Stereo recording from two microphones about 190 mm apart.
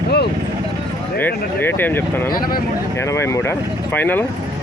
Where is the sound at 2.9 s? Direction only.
15° left (ahead or behind).